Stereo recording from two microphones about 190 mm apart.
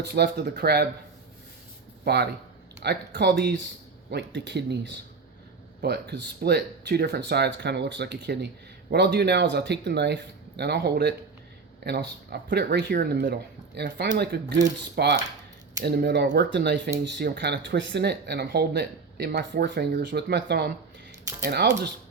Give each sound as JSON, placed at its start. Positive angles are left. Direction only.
{"t": 0.0, "sound": "speech", "side_deg": -60}
{"t": 2.0, "sound": "speech", "side_deg": -60}